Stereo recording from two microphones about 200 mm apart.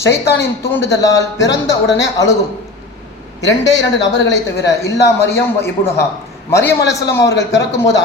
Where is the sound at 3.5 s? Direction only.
65° left (ahead or behind).